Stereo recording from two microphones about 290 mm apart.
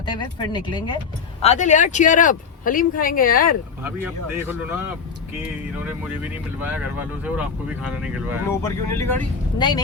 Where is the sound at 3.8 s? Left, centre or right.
Centre.